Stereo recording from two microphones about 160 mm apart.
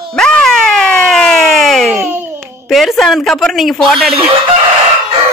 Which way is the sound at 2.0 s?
15° right (ahead or behind).